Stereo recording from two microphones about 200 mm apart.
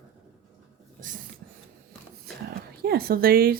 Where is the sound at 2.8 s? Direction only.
50° right (ahead or behind).